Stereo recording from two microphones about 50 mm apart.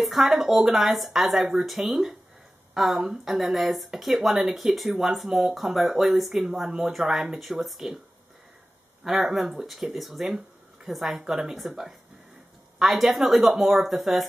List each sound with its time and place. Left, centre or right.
0.0 s speech: centre
9.0 s speech: centre